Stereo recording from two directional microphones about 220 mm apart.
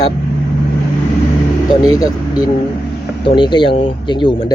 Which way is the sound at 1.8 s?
15° left (ahead or behind).